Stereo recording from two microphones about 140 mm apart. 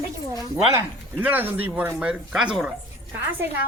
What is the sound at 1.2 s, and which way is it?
Speech, 15° right (ahead or behind).